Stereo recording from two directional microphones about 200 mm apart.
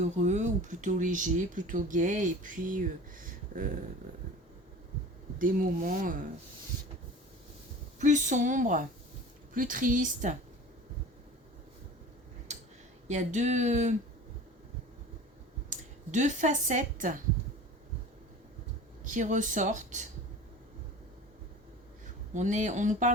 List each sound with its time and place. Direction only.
0.0 s speech: 35° right (ahead or behind)
5.4 s speech: 45° right (ahead or behind)
7.9 s speech: 35° right (ahead or behind)
13.1 s speech: 35° right (ahead or behind)
15.7 s speech: 35° right (ahead or behind)
19.0 s speech: 40° right (ahead or behind)
22.0 s speech: 35° right (ahead or behind)